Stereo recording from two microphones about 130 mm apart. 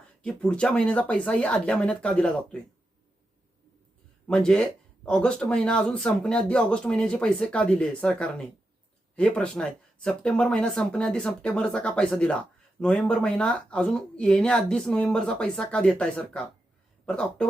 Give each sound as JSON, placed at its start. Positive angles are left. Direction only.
{"t": 0.2, "sound": "speech", "side_deg": 10}
{"t": 4.3, "sound": "speech", "side_deg": 5}